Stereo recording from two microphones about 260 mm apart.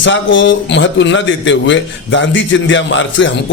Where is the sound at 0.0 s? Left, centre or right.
Left.